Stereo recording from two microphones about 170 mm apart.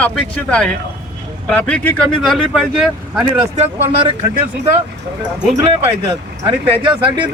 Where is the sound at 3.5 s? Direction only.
40° right (ahead or behind).